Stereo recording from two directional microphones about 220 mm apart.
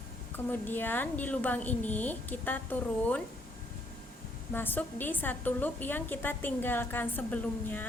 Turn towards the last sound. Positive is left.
turn(degrees=5)  # may be behind; listen again after turning